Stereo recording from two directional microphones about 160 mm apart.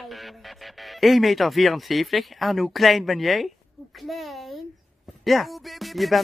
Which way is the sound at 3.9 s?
Centre (ahead or behind).